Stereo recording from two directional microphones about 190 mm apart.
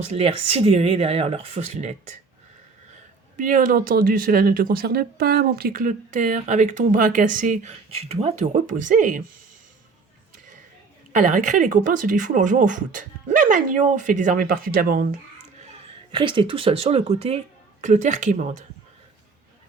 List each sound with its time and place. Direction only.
0.0 s speech: 35° right (ahead or behind)
3.3 s speech: 45° right (ahead or behind)
11.1 s speech: 40° right (ahead or behind)
16.1 s speech: 25° right (ahead or behind)